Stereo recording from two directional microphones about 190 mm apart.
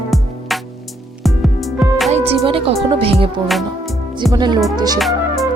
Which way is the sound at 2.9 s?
30° right (ahead or behind).